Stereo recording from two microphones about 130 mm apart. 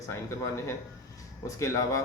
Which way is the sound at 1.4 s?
25° left (ahead or behind).